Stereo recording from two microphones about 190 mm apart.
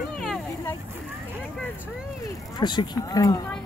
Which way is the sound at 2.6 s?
20° left (ahead or behind).